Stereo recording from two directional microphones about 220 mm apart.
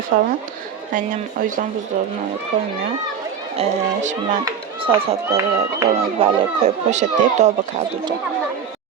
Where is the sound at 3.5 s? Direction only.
35° right (ahead or behind).